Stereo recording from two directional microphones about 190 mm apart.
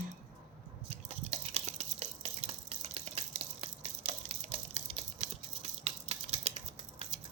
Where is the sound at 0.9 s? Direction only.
30° right (ahead or behind).